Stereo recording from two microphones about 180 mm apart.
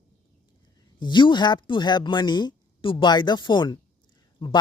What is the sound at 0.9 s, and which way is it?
Speech, 25° left (ahead or behind).